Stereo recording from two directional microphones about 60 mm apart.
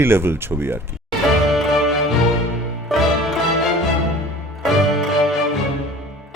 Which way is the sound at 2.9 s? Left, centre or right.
Centre.